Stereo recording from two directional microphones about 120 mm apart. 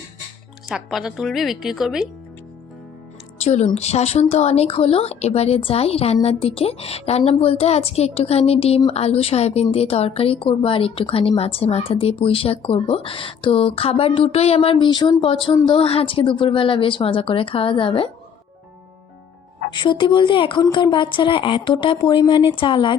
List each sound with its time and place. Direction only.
0.7 s speech: 5° right (ahead or behind)
3.4 s a woman's voice: 70° left (ahead or behind); by 18.1 s 50° left (ahead or behind)
19.7 s a woman's voice: 40° left (ahead or behind)